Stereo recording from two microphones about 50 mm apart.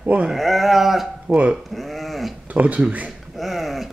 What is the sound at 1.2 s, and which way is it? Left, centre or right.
Speech, right.